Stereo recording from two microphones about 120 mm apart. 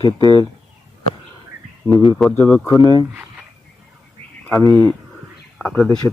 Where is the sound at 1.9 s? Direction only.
35° left (ahead or behind).